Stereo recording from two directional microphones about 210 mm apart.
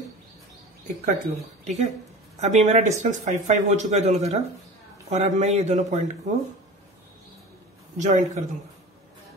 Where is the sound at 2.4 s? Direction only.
35° right (ahead or behind).